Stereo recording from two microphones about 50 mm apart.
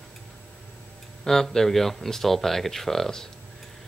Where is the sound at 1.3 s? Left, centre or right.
Centre.